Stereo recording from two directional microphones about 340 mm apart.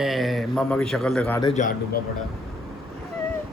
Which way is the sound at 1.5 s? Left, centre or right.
Left.